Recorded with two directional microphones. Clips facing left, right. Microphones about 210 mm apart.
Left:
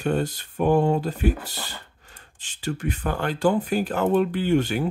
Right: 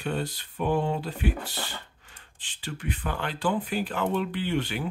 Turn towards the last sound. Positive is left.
turn(degrees=45)  # may be behind; listen again after turning